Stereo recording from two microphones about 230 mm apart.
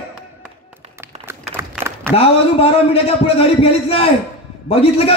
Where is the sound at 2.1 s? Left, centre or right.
Left.